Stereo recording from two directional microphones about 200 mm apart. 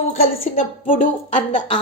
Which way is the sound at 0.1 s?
35° left (ahead or behind).